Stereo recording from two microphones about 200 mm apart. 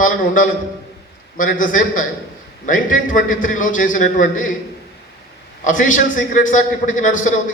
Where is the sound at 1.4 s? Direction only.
40° left (ahead or behind).